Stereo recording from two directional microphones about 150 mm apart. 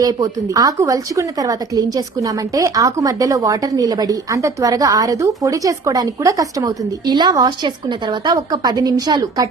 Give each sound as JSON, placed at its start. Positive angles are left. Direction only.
{"t": 0.0, "sound": "speech", "side_deg": -25}